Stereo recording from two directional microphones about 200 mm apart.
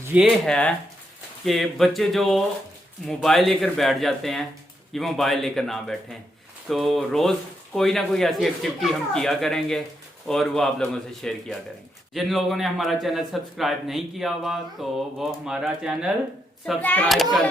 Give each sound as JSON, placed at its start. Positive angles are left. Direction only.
{"t": 0.0, "sound": "speech", "side_deg": -10}
{"t": 0.4, "sound": "speech", "side_deg": 5}
{"t": 16.6, "sound": "speech", "side_deg": 5}